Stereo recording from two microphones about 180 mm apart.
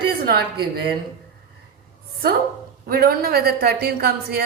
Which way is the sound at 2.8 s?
55° right (ahead or behind).